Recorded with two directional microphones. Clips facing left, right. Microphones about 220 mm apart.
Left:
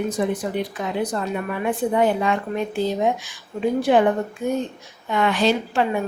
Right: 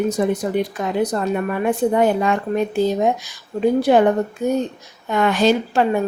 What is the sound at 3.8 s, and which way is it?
A woman's voice, 40° right (ahead or behind).